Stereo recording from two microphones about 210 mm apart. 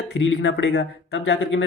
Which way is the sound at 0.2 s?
60° left (ahead or behind).